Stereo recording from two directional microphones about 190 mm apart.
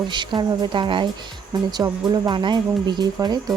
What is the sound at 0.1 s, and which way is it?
Speech, 25° right (ahead or behind).